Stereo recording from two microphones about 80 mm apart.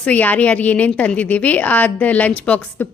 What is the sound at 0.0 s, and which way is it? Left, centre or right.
A woman's voice, centre.